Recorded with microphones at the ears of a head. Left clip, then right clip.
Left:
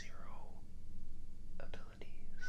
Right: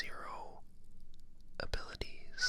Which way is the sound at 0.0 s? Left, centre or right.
Right.